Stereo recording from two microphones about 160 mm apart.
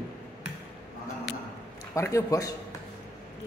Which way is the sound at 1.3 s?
5° right (ahead or behind).